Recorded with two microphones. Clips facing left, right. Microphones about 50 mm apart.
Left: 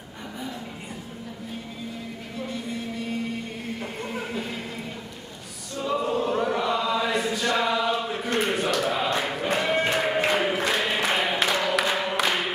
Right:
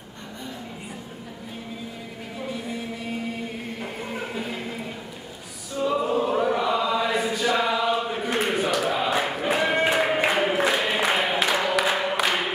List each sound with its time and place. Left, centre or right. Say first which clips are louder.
2.3 s music: right 1 dB; centre
5.8 s choir: right 2 dB; centre